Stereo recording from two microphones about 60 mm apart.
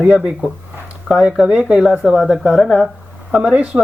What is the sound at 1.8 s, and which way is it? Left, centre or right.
Speech, centre.